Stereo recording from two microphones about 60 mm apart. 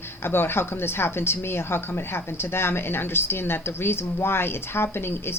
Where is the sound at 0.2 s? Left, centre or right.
Left.